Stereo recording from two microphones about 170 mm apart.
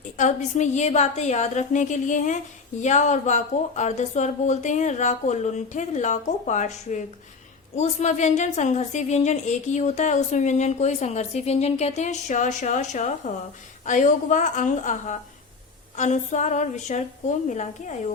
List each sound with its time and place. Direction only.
0.2 s a woman's voice: 45° left (ahead or behind)